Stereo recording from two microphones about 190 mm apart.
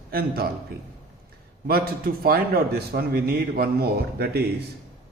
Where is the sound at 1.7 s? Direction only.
50° right (ahead or behind).